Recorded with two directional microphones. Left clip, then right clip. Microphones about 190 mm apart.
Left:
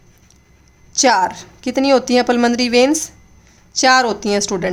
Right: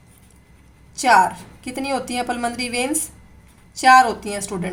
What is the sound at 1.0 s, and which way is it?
Speech, 50° left (ahead or behind).